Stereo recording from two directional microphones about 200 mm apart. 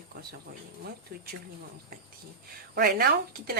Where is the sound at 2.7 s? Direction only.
50° right (ahead or behind).